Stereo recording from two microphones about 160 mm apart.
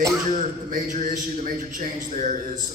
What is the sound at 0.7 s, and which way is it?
A man's voice, 55° right (ahead or behind).